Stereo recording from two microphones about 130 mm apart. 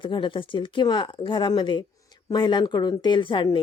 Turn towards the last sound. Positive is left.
turn(degrees=40)  # may be behind; listen again after turning